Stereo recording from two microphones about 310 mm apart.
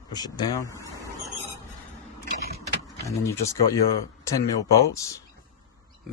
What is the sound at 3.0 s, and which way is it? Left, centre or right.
Speech, centre.